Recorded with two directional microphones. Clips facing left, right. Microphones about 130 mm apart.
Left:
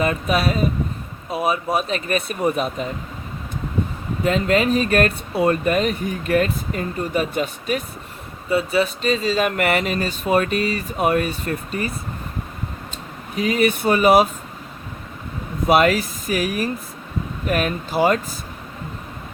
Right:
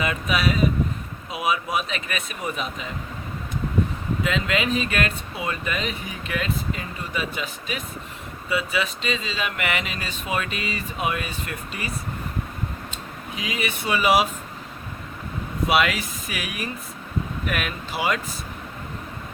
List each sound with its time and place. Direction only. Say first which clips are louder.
0.0 s speech: left 4 dB; 40° left (ahead or behind)
4.2 s speech: left 7 dB; 45° left (ahead or behind)
13.3 s speech: left 11 dB; 45° left (ahead or behind)
15.6 s speech: left 6 dB; 40° left (ahead or behind)